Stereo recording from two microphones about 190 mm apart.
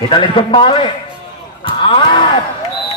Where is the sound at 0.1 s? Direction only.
25° left (ahead or behind).